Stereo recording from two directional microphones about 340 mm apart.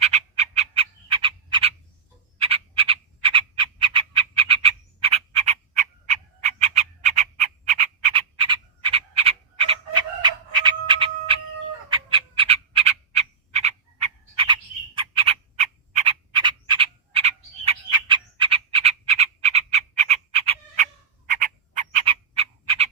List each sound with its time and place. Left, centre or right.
0.0 s frog: centre